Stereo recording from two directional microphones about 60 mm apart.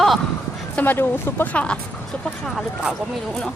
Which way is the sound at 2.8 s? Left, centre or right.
Centre.